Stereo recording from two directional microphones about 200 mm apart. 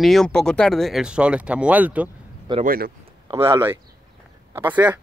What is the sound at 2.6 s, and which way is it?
Speech, 45° right (ahead or behind).